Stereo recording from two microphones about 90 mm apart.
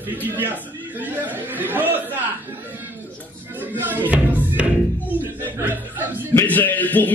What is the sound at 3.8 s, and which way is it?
Music, 20° right (ahead or behind).